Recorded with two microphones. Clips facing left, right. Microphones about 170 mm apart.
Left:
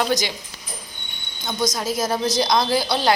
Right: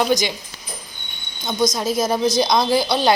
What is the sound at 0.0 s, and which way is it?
Speech, 15° right (ahead or behind).